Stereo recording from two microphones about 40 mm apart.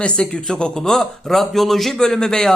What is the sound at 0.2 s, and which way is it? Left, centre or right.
A man's voice, centre.